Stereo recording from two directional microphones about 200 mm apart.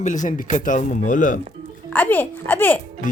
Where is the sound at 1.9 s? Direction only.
10° left (ahead or behind).